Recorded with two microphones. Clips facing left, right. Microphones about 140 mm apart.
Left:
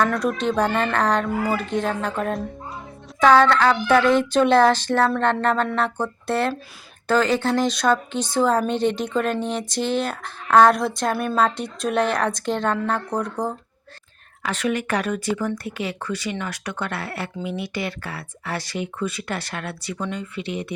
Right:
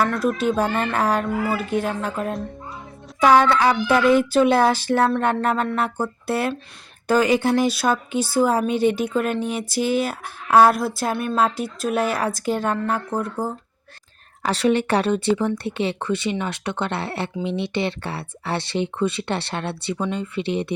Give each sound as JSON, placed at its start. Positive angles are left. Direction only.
{"t": 0.0, "sound": "speech", "side_deg": 0}
{"t": 3.2, "sound": "speech", "side_deg": -10}
{"t": 14.4, "sound": "speech", "side_deg": -30}